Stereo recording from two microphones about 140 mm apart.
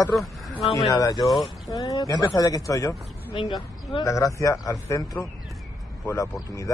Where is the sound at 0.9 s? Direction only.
25° left (ahead or behind).